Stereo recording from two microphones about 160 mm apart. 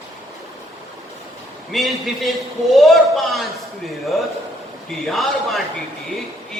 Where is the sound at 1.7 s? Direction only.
Centre (ahead or behind).